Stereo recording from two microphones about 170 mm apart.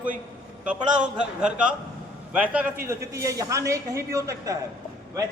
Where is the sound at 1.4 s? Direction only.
5° right (ahead or behind).